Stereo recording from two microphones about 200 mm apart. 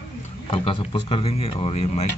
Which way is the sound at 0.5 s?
25° left (ahead or behind).